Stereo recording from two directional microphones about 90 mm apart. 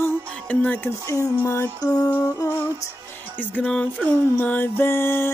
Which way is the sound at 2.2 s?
30° left (ahead or behind).